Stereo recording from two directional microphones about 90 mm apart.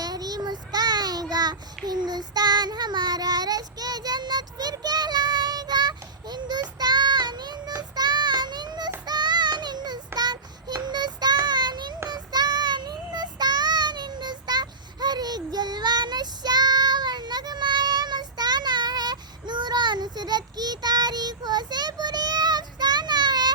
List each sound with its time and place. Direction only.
0.0 s child singing: 45° right (ahead or behind)